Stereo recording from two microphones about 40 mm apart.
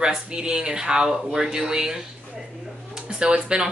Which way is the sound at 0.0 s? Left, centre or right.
Right.